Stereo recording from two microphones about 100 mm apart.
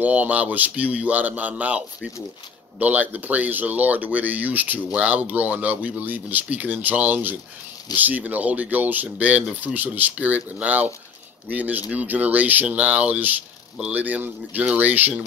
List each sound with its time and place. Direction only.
0.0 s speech: 15° right (ahead or behind)
2.8 s speech: 15° right (ahead or behind)